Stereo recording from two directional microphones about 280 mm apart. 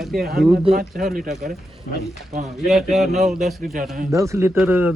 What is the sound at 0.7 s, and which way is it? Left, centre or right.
Speech, right.